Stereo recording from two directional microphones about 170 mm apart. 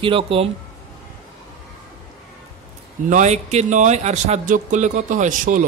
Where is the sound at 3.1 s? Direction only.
45° right (ahead or behind).